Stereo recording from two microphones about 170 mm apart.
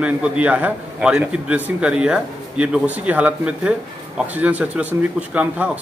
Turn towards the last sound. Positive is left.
turn(degrees=-10)  # may be behind; listen again after turning